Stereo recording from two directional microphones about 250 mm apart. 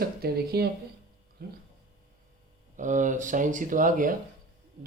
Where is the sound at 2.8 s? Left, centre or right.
Right.